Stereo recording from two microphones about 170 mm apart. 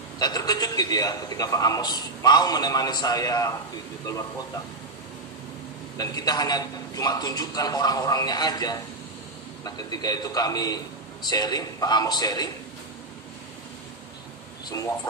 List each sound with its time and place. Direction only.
0.2 s a man's voice: 25° left (ahead or behind)
5.9 s a man's voice: 20° left (ahead or behind)